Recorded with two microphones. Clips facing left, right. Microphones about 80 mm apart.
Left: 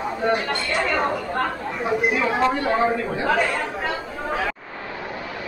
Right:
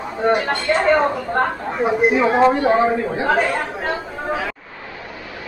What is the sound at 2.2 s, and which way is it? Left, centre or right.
Speech, right.